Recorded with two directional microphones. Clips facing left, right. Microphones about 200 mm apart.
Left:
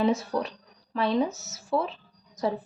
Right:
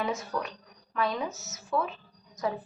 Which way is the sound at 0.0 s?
30° left (ahead or behind).